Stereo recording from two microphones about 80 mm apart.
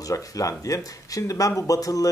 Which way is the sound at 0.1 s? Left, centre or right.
Left.